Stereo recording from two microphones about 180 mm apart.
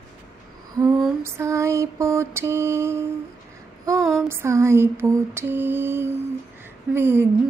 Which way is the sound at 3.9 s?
Centre (ahead or behind).